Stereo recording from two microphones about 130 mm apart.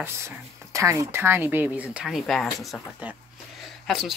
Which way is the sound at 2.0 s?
Centre (ahead or behind).